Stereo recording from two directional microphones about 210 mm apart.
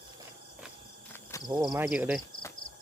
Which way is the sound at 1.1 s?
15° left (ahead or behind).